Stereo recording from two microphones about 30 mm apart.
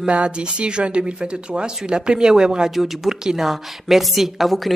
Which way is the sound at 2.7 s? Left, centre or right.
Centre.